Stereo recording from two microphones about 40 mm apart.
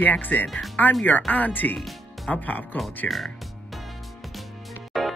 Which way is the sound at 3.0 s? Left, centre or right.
Left.